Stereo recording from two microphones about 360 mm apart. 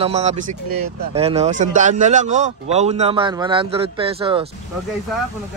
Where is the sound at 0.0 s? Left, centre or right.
Centre.